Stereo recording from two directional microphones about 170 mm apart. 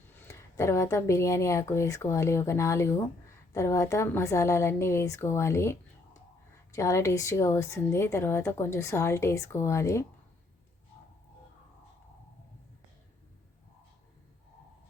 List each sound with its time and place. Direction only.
0.2 s a woman's voice: 15° left (ahead or behind)